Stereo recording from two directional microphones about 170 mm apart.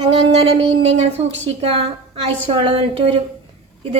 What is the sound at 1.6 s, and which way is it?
A woman's voice, 35° right (ahead or behind).